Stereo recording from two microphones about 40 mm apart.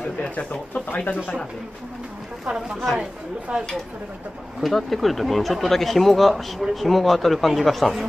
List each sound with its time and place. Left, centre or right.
0.0 s speech: left
2.4 s speech: centre
4.6 s speech: centre